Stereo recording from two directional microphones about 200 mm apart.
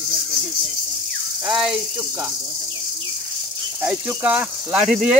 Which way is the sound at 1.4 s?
Centre (ahead or behind).